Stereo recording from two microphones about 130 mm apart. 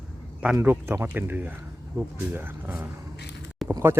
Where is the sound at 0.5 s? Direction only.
15° right (ahead or behind).